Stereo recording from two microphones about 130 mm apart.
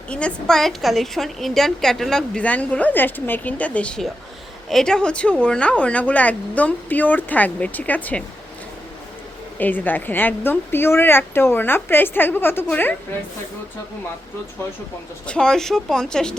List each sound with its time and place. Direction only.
0.1 s a woman's voice: 10° left (ahead or behind)
9.6 s speech: 15° left (ahead or behind)
15.3 s a woman's voice: 5° left (ahead or behind)